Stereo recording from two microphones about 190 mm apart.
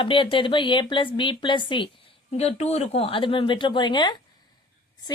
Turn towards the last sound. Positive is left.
turn(degrees=25)  # may be behind; listen again after turning